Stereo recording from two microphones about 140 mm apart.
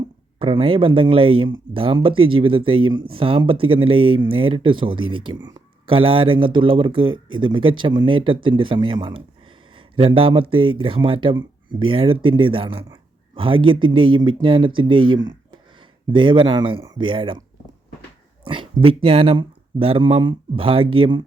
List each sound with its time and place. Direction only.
0.3 s speech: 40° right (ahead or behind)
18.4 s speech: 35° right (ahead or behind)